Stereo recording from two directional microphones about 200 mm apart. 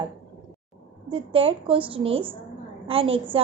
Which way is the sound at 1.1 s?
25° right (ahead or behind).